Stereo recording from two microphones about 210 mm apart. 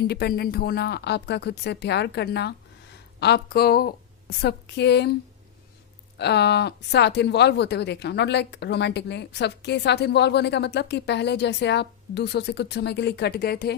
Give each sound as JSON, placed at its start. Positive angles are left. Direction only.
{"t": 0.1, "sound": "a woman's voice", "side_deg": 45}
{"t": 6.1, "sound": "speech", "side_deg": 55}